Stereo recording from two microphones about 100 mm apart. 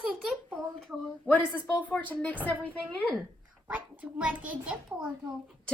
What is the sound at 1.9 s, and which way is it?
A woman's voice, 15° left (ahead or behind).